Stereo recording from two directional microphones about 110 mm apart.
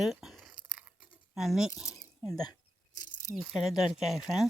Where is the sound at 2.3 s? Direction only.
35° left (ahead or behind).